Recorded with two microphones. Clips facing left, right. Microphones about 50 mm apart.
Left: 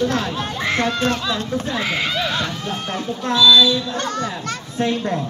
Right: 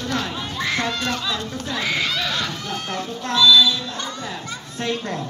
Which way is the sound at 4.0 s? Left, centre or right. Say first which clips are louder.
Left 6 dB; left.